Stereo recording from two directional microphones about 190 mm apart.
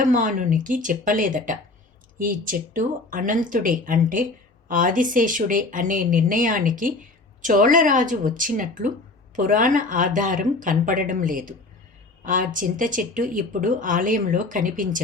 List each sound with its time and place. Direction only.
0.0 s speech: 45° right (ahead or behind)